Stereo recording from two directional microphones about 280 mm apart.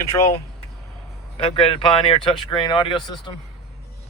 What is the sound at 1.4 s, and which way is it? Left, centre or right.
Speech, centre.